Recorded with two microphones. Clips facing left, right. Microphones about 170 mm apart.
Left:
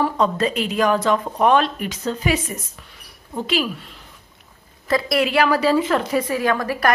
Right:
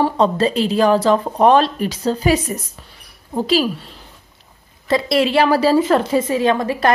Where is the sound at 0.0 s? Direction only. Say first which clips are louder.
Right 4 dB; 30° right (ahead or behind).